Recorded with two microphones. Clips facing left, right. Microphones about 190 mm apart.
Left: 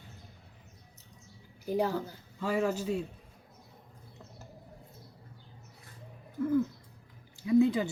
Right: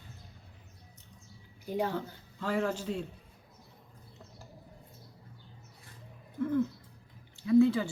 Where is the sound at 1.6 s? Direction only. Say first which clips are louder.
Left 3 dB; 40° left (ahead or behind).